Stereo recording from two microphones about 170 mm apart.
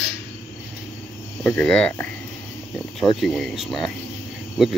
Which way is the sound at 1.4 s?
5° left (ahead or behind).